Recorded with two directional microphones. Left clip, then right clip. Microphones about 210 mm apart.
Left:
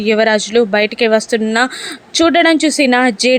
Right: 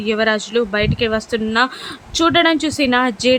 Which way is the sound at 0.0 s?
20° left (ahead or behind).